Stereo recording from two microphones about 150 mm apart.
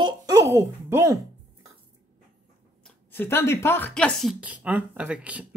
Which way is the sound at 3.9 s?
5° left (ahead or behind).